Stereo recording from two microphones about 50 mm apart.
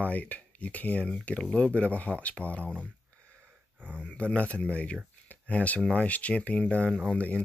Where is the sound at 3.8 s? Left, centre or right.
Right.